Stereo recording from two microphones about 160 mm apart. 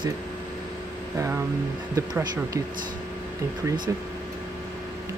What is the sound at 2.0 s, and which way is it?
Speech, 20° right (ahead or behind).